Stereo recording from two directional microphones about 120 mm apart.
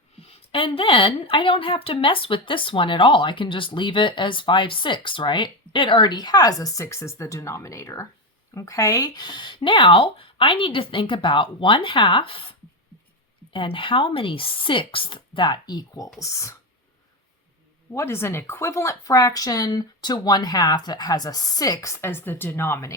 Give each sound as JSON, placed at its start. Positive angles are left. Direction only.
{"t": 0.2, "sound": "a woman's voice", "side_deg": 55}
{"t": 17.9, "sound": "speech", "side_deg": 20}